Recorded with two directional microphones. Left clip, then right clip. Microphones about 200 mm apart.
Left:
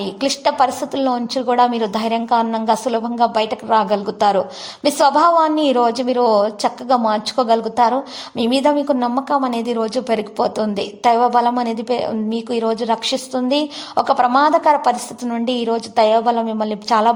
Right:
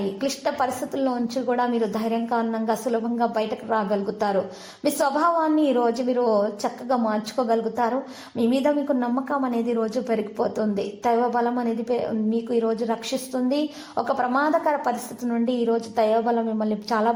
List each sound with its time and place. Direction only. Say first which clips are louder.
0.2 s a woman's voice: left 11 dB; 25° left (ahead or behind)